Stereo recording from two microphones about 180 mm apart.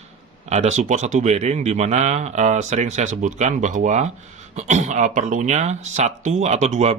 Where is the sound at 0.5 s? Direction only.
40° right (ahead or behind).